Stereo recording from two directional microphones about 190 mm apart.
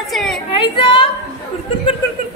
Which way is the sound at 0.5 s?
25° left (ahead or behind).